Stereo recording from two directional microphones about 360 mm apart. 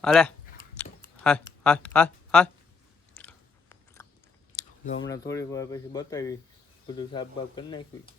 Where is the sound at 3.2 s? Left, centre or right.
Centre.